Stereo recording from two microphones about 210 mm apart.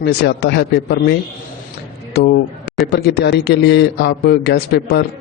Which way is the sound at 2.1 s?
50° left (ahead or behind).